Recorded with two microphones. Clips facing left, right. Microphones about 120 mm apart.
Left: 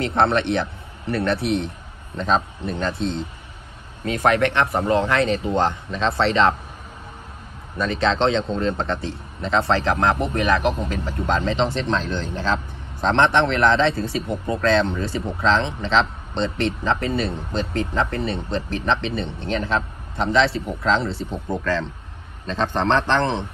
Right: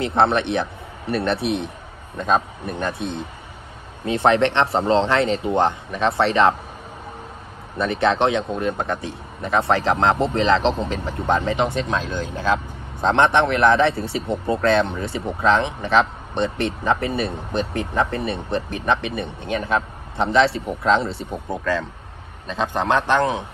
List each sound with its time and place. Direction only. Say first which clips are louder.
0.0 s speech: right 1 dB; 20° right (ahead or behind)
2.9 s speech: left 2 dB; 60° right (ahead or behind)
4.0 s speech: right 2 dB; 25° right (ahead or behind)
7.7 s a man's voice: right 2 dB; 20° right (ahead or behind)